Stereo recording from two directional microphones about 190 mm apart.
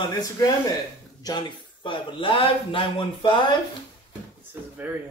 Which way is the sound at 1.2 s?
20° left (ahead or behind).